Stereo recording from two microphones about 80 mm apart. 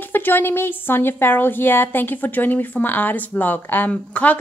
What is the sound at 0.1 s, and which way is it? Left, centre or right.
A woman's voice, left.